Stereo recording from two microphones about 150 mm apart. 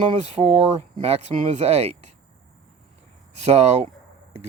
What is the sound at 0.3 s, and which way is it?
Speech, 45° right (ahead or behind).